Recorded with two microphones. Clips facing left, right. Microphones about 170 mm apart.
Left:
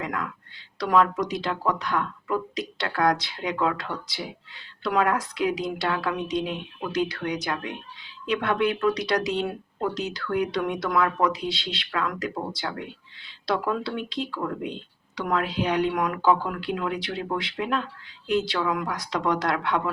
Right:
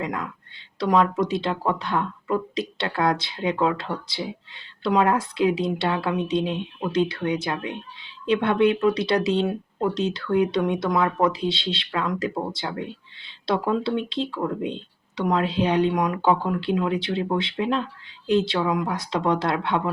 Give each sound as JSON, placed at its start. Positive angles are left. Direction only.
{"t": 0.0, "sound": "a woman's voice", "side_deg": -25}